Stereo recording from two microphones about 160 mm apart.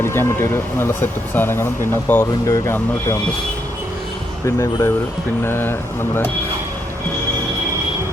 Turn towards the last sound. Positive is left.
turn(degrees=15)  # may be behind; listen again after turning